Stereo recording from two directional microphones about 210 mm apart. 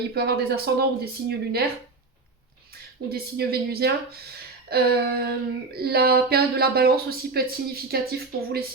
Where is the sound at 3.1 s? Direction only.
50° right (ahead or behind).